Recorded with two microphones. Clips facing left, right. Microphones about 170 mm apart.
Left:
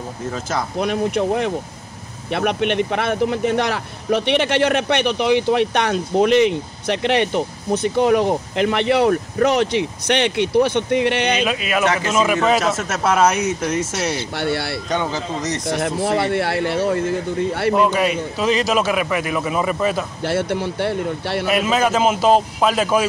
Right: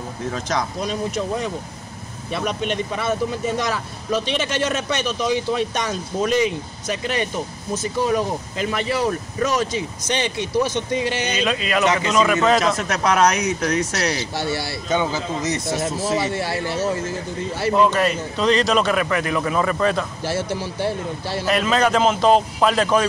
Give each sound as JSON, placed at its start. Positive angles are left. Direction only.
{"t": 0.3, "sound": "speech", "side_deg": 5}
{"t": 0.7, "sound": "speech", "side_deg": 60}
{"t": 11.4, "sound": "speech", "side_deg": 10}
{"t": 14.1, "sound": "speech", "side_deg": 60}
{"t": 14.9, "sound": "speech", "side_deg": -5}
{"t": 15.6, "sound": "speech", "side_deg": 60}
{"t": 17.7, "sound": "a man's voice", "side_deg": 0}
{"t": 20.2, "sound": "speech", "side_deg": 60}
{"t": 21.5, "sound": "speech", "side_deg": 5}